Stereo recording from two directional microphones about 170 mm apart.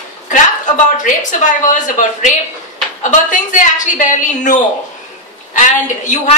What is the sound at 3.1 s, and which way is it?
A woman's voice, 50° left (ahead or behind).